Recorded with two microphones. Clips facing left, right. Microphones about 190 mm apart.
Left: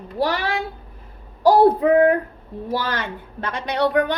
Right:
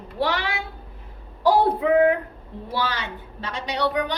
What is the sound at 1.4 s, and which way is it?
A woman's voice, 40° left (ahead or behind).